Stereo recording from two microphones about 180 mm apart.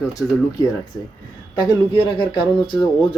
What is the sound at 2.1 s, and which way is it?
Speech, 25° left (ahead or behind).